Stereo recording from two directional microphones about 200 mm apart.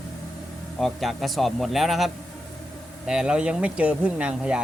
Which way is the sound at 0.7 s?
Centre (ahead or behind).